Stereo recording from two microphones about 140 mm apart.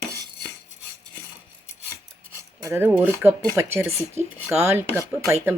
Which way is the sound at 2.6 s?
15° right (ahead or behind).